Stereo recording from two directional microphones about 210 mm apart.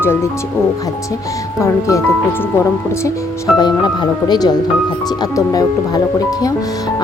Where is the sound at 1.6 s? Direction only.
15° left (ahead or behind).